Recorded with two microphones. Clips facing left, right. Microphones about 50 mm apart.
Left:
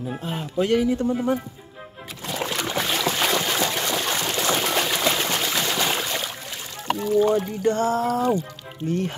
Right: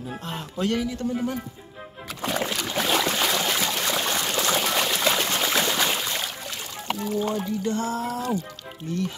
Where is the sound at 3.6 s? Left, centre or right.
Left.